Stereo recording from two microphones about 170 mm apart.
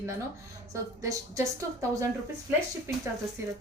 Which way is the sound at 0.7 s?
20° right (ahead or behind).